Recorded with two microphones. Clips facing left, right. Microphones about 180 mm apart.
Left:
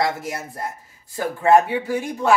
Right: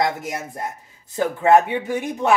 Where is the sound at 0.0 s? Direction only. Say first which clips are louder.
Right 1 dB; 20° right (ahead or behind).